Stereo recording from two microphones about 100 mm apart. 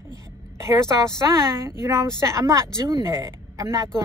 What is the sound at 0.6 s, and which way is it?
A woman's voice, 30° right (ahead or behind).